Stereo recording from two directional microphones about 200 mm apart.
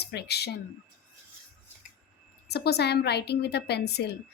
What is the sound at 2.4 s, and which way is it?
A woman's voice, 55° left (ahead or behind).